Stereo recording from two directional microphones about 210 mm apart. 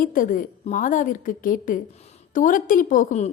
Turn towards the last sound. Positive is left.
turn(degrees=35)  # may be behind; listen again after turning